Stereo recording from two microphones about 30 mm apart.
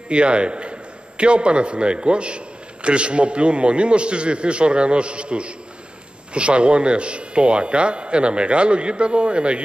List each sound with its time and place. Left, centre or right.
0.1 s a man's voice: right